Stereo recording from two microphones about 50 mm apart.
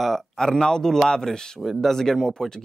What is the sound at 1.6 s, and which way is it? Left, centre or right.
Speech, centre.